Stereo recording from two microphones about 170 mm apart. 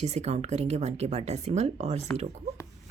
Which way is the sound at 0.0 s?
40° right (ahead or behind).